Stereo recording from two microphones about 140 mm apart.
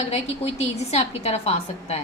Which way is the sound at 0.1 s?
50° left (ahead or behind).